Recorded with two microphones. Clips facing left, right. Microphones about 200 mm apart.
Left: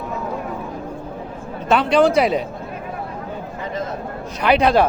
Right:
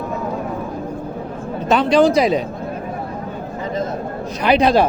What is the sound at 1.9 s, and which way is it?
Speech, 35° right (ahead or behind).